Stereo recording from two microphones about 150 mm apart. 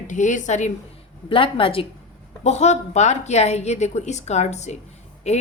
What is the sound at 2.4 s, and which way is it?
Speech, 50° left (ahead or behind).